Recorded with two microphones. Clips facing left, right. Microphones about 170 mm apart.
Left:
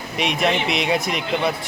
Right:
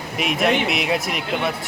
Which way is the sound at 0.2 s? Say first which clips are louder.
Right 1 dB; 5° right (ahead or behind).